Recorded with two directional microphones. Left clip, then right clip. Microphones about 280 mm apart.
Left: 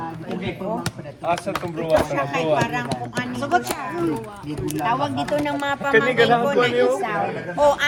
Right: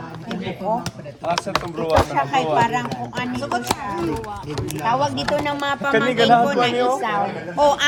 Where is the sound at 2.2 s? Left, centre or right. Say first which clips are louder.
Right 3 dB; right.